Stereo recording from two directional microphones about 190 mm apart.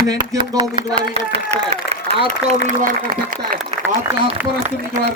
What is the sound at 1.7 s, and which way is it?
Applause, 30° right (ahead or behind).